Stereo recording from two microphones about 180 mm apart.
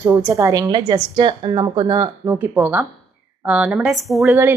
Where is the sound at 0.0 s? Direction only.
10° right (ahead or behind).